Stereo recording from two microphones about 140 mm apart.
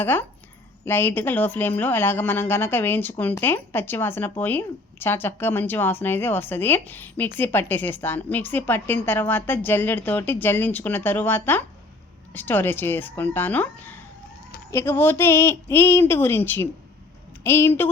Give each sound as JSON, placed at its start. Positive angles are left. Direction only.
{"t": 0.0, "sound": "a woman's voice", "side_deg": 15}